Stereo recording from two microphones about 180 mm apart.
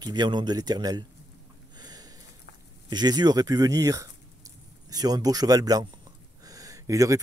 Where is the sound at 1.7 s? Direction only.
20° right (ahead or behind).